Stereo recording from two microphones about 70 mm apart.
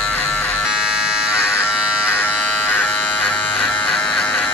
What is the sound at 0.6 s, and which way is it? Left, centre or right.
Electric shaver, centre.